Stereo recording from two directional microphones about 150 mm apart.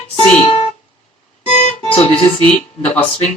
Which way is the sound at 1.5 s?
50° left (ahead or behind).